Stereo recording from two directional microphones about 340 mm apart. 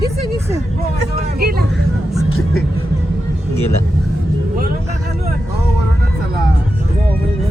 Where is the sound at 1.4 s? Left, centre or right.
Right.